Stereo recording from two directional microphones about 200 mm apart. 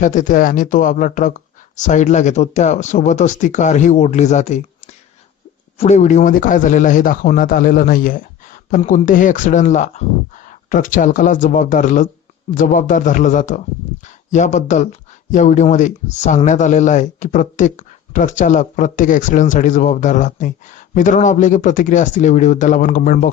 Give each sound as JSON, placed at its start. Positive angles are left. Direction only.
{"t": 0.0, "sound": "speech", "side_deg": 40}